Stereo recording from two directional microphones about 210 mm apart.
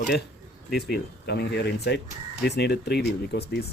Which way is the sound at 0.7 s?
50° left (ahead or behind).